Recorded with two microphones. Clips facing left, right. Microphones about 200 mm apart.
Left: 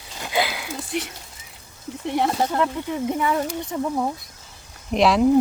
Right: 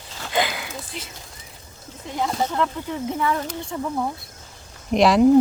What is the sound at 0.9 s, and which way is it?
Speech, 70° left (ahead or behind).